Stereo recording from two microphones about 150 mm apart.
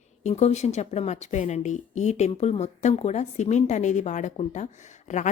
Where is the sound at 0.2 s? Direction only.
45° left (ahead or behind).